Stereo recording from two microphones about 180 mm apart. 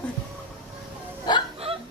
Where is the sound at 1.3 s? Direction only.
25° left (ahead or behind).